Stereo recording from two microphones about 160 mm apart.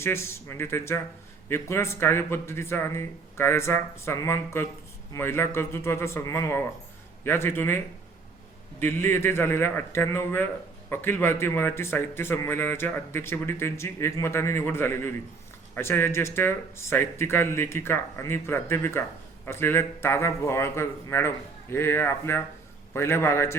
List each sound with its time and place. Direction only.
0.0 s a man's voice: 15° left (ahead or behind)
8.8 s a man's voice: 15° left (ahead or behind)